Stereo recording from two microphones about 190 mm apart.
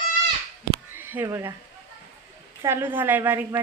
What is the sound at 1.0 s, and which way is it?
Speech, 10° right (ahead or behind).